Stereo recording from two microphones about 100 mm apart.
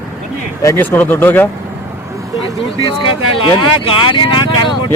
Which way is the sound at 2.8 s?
55° left (ahead or behind).